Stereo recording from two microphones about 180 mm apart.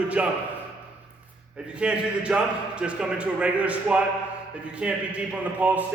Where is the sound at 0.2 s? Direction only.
5° right (ahead or behind).